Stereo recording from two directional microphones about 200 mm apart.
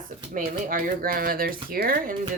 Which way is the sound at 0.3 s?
45° right (ahead or behind).